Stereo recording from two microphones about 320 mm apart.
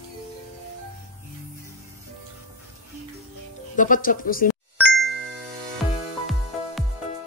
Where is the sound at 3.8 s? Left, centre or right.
Left.